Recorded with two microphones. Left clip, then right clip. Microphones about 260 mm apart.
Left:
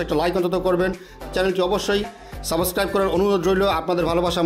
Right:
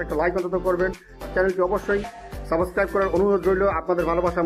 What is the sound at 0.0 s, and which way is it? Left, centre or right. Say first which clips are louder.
Speech: left 2 dB; left.